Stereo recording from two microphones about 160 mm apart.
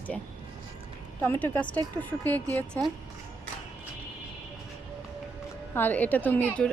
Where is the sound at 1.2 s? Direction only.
15° left (ahead or behind).